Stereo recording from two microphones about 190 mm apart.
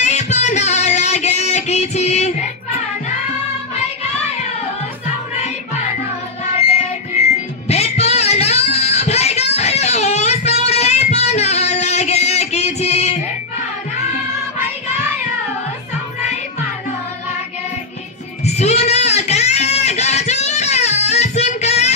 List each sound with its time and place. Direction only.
0.0 s a sound: 35° left (ahead or behind)
7.2 s music: 35° left (ahead or behind)
18.4 s music: 35° left (ahead or behind)